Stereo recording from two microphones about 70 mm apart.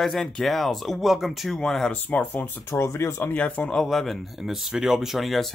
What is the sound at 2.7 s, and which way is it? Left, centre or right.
Speech, left.